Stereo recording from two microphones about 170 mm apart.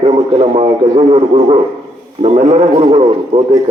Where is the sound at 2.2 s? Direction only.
45° right (ahead or behind).